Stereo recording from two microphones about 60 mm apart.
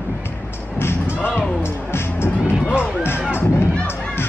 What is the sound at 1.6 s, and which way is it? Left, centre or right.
Speech, left.